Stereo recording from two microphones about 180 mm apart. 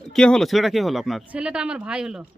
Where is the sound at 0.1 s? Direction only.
5° left (ahead or behind).